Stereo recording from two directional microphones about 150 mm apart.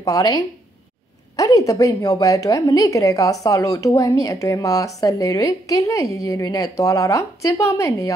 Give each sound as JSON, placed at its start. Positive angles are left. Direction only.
{"t": 0.0, "sound": "speech", "side_deg": 25}